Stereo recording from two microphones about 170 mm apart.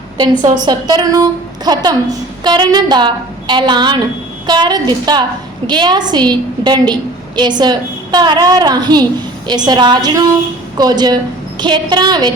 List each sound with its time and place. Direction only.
0.5 s a woman's voice: 25° right (ahead or behind)